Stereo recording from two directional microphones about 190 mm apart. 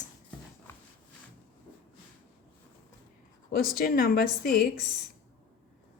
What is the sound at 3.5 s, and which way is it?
Speech, 55° left (ahead or behind).